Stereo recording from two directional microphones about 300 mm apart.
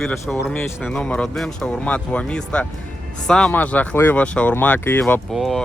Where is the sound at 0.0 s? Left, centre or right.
Centre.